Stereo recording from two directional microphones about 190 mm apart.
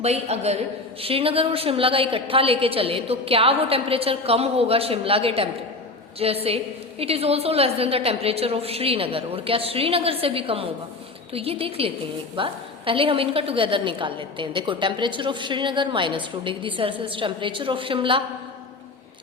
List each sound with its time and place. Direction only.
0.0 s a woman's voice: 35° right (ahead or behind)